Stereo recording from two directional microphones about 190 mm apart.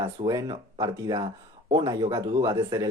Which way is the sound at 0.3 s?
20° right (ahead or behind).